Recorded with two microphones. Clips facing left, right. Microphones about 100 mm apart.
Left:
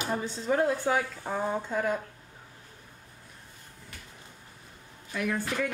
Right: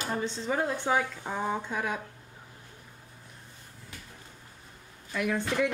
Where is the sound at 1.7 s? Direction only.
Centre (ahead or behind).